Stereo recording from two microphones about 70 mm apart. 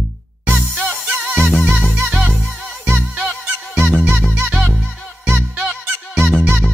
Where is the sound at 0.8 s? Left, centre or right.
Centre.